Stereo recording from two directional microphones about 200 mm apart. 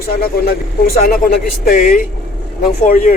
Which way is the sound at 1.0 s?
45° left (ahead or behind).